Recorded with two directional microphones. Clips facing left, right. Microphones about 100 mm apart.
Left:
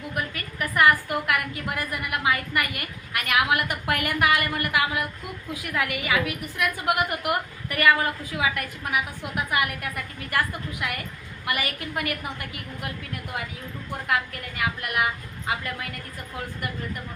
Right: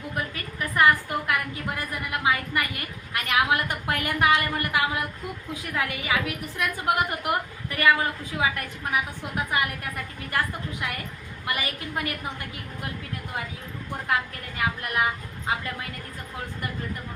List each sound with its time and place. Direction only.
0.1 s a woman's voice: 25° right (ahead or behind)
11.4 s a woman's voice: 25° right (ahead or behind)
14.1 s a woman's voice: 30° right (ahead or behind)